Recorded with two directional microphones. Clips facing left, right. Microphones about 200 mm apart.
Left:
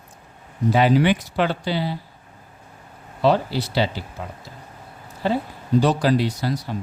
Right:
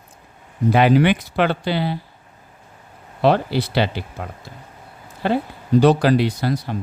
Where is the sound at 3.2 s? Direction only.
60° right (ahead or behind).